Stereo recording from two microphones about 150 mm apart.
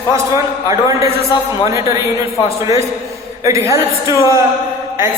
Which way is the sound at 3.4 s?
20° right (ahead or behind).